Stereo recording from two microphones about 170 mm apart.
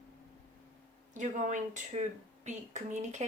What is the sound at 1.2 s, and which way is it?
Speech, 45° right (ahead or behind).